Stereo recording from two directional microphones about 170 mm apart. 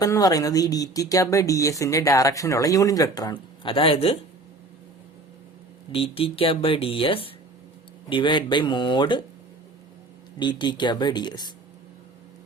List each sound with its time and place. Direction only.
0.0 s speech: 20° left (ahead or behind)
5.9 s speech: 35° left (ahead or behind)
10.3 s speech: 25° left (ahead or behind)